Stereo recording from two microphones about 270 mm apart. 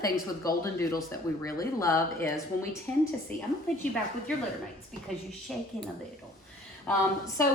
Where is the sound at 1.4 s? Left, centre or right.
Centre.